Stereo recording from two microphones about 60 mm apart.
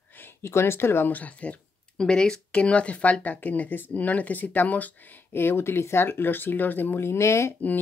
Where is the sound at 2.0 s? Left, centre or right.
Centre; by 4.9 s left.